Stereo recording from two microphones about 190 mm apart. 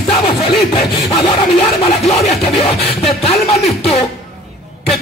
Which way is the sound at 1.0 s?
30° left (ahead or behind).